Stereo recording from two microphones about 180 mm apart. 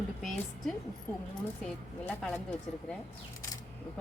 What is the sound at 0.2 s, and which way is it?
Speech, centre (ahead or behind).